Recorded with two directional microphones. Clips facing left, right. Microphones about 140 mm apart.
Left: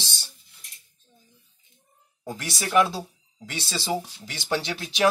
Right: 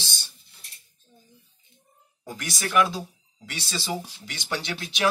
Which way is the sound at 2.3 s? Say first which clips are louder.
Left 2 dB; 25° left (ahead or behind).